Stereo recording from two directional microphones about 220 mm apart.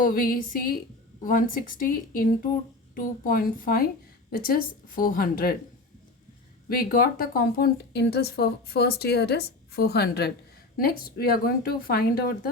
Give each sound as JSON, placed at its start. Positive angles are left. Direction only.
{"t": 0.0, "sound": "speech", "side_deg": 40}
{"t": 6.7, "sound": "a woman's voice", "side_deg": 40}